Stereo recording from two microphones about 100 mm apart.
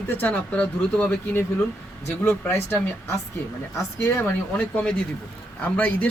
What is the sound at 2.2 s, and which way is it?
Speech, 20° left (ahead or behind).